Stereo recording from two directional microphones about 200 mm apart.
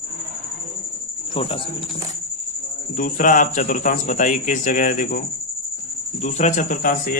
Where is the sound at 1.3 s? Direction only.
30° left (ahead or behind).